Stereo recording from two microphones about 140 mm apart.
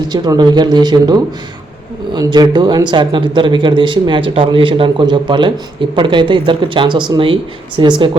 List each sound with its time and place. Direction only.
0.1 s speech: 30° right (ahead or behind)